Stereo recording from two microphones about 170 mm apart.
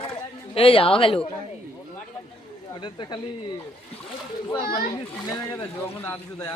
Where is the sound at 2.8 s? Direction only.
25° left (ahead or behind).